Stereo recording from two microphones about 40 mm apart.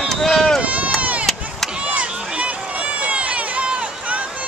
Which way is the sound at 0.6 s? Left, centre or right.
Right.